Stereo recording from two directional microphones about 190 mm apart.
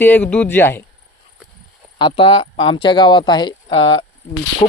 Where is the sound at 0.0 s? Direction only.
10° left (ahead or behind).